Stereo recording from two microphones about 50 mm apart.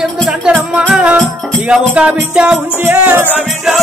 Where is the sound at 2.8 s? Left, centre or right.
Right.